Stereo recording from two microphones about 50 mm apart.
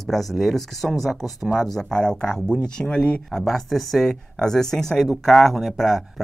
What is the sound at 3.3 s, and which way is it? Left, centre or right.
Speech, centre.